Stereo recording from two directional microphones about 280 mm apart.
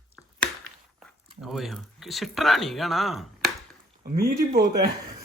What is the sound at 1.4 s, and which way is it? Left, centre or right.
Speech, centre.